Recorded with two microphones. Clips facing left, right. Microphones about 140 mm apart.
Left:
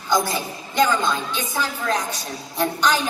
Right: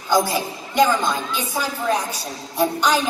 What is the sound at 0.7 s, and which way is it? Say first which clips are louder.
A woman's voice: right 2 dB; 10° right (ahead or behind).